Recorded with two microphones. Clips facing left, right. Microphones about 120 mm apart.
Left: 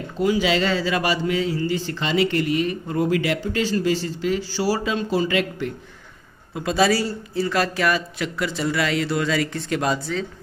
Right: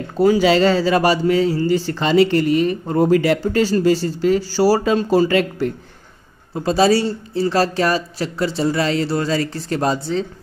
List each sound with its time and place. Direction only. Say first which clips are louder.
0.2 s speech: right 7 dB; 40° right (ahead or behind)